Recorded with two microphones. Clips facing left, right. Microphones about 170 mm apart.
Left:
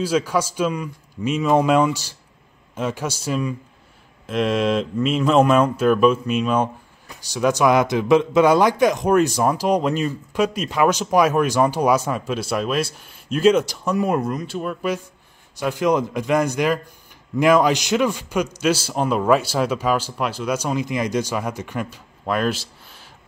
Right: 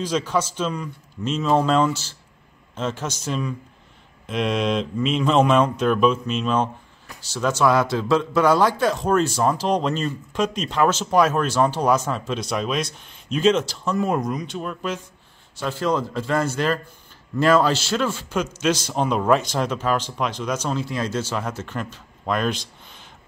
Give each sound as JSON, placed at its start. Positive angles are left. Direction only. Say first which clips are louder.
{"t": 0.0, "sound": "speech", "louder": "left 3 dB", "side_deg": 10}